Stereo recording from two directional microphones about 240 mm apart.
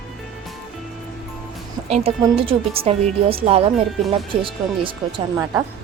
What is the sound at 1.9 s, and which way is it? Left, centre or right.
A woman's voice, right.